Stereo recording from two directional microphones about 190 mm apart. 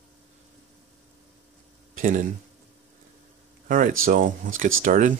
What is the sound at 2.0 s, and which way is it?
Speech, 45° right (ahead or behind).